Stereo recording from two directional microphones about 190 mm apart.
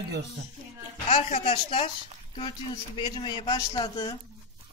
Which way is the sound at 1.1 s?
30° left (ahead or behind).